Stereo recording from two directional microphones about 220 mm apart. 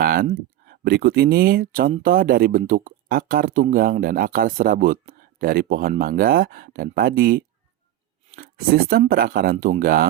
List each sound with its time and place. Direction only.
0.0 s speech: 45° right (ahead or behind)